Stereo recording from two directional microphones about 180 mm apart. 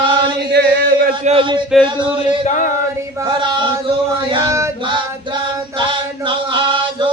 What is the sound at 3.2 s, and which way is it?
Choir, 25° right (ahead or behind).